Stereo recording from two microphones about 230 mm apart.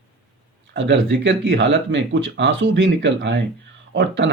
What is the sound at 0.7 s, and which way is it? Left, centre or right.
Speech, right.